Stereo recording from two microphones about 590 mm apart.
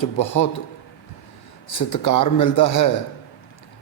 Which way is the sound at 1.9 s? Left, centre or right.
Left.